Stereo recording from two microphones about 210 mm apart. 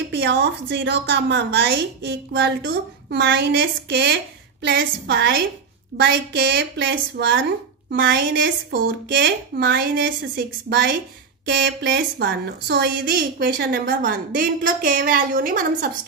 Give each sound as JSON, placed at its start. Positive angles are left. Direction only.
{"t": 0.1, "sound": "a woman's voice", "side_deg": -55}